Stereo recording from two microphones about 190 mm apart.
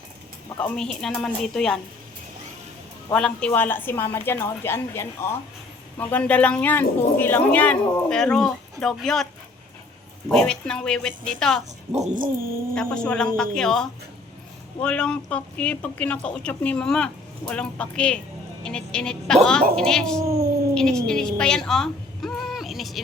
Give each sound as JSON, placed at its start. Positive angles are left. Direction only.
{"t": 1.0, "sound": "speech", "side_deg": 5}
{"t": 3.1, "sound": "speech", "side_deg": 5}
{"t": 10.2, "sound": "speech", "side_deg": 5}
{"t": 11.9, "sound": "dog", "side_deg": -40}
{"t": 12.7, "sound": "speech", "side_deg": 5}
{"t": 20.7, "sound": "a sound", "side_deg": 5}